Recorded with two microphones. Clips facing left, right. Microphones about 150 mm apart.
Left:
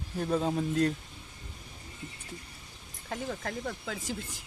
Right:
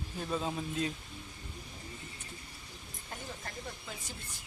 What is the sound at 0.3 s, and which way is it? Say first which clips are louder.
Speech: left 7 dB; 50° left (ahead or behind).